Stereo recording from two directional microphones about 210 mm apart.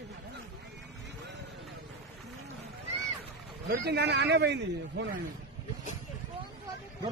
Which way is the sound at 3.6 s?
50° right (ahead or behind).